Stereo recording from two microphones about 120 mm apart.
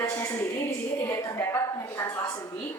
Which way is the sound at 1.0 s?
25° left (ahead or behind).